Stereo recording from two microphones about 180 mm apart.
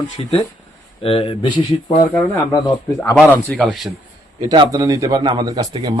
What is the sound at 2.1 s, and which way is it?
Speech, 15° left (ahead or behind).